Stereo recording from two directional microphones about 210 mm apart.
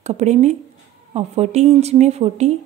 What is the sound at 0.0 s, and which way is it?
Speech, 35° right (ahead or behind).